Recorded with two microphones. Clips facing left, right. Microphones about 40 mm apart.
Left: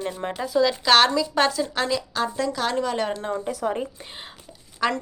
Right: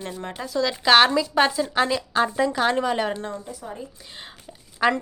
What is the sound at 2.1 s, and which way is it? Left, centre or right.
Speech, right.